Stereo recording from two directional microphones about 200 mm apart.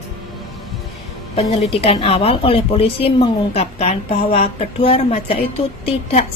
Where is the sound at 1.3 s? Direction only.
30° left (ahead or behind).